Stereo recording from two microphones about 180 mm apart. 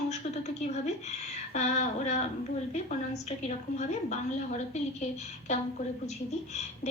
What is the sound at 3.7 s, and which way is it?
Speech, 40° left (ahead or behind).